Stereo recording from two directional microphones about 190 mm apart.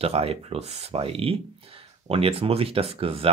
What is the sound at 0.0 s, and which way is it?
Speech, 30° right (ahead or behind).